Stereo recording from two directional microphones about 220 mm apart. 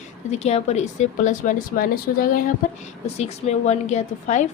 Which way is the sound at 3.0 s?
30° left (ahead or behind).